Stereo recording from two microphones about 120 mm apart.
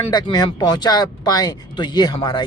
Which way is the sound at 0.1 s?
35° left (ahead or behind).